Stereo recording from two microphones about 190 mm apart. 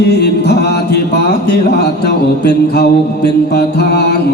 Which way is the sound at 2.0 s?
60° left (ahead or behind).